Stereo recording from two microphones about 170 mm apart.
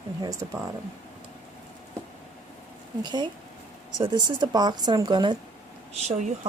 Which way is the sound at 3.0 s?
25° right (ahead or behind).